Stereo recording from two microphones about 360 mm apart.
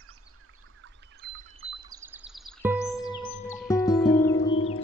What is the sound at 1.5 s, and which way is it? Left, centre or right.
Music, centre.